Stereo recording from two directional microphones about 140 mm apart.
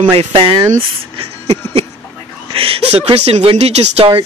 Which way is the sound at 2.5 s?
40° right (ahead or behind).